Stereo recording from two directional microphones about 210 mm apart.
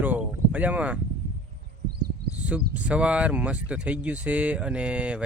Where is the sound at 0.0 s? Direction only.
10° right (ahead or behind).